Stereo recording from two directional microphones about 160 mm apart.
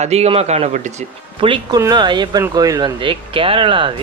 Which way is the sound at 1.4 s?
30° right (ahead or behind).